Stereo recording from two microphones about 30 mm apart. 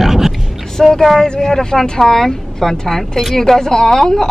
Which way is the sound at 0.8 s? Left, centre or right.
Centre.